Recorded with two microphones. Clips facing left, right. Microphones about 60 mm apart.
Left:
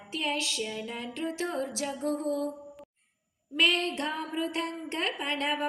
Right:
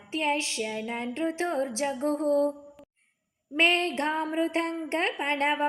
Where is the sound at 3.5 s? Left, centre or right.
Right.